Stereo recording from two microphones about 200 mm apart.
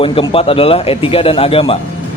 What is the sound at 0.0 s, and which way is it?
A man's voice, 25° left (ahead or behind).